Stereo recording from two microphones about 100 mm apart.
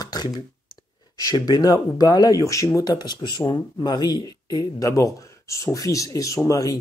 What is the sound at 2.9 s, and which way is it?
Speech, 45° left (ahead or behind).